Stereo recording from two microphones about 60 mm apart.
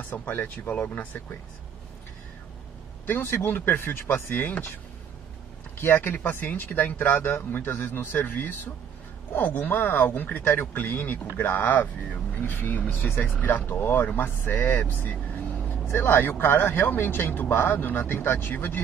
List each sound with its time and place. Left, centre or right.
0.1 s speech: left
3.1 s speech: left
5.8 s speech: left